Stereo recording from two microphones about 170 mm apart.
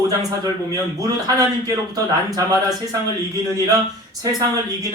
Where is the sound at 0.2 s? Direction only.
20° right (ahead or behind).